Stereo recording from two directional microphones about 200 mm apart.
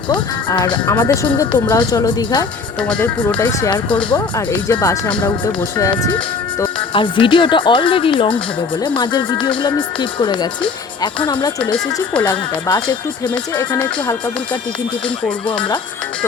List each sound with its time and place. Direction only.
0.1 s speech: 25° left (ahead or behind)
2.8 s speech: 5° left (ahead or behind)
4.1 s speech: 20° left (ahead or behind)
6.7 s speech: 25° left (ahead or behind)
13.7 s speech: 10° left (ahead or behind)